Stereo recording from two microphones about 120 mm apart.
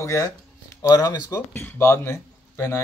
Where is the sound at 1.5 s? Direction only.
15° left (ahead or behind).